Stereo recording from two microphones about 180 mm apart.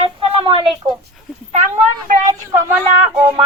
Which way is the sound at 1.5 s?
45° right (ahead or behind).